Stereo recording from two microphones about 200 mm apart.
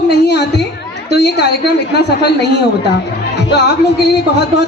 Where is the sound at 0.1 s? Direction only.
60° left (ahead or behind).